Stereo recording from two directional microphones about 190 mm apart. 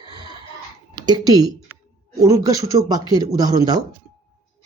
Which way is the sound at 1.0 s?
20° right (ahead or behind).